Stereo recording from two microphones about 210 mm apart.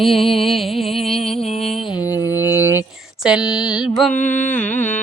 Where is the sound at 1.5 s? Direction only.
30° left (ahead or behind).